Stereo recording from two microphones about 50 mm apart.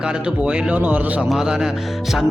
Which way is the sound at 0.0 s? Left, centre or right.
Centre.